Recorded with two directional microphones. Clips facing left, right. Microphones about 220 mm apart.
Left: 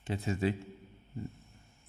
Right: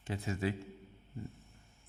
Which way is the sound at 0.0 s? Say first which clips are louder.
Left 4 dB; 25° left (ahead or behind).